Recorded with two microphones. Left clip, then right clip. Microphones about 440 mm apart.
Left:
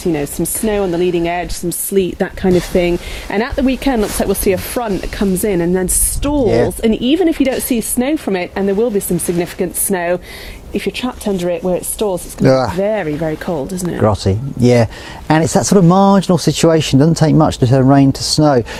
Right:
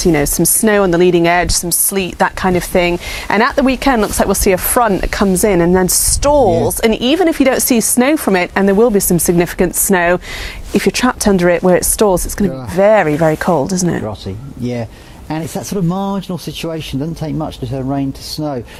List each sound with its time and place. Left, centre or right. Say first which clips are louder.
0.0 s speech: right 5 dB; right
14.0 s speech: left 10 dB; left